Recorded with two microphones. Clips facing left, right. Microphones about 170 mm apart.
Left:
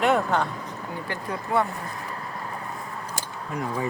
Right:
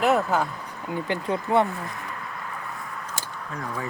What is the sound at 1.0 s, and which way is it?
Speech, 20° right (ahead or behind).